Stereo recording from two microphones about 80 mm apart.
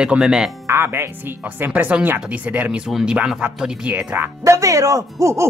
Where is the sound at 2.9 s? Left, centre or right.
Centre.